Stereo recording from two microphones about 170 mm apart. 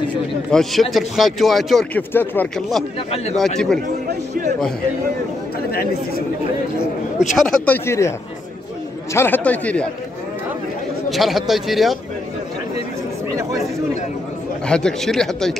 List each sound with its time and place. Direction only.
0.5 s speech: centre (ahead or behind)
4.1 s a sound: 70° right (ahead or behind)
5.7 s speech: 60° left (ahead or behind)
7.3 s speech: 5° left (ahead or behind)
9.1 s speech: 10° left (ahead or behind)
11.1 s speech: centre (ahead or behind)
14.7 s speech: 5° left (ahead or behind)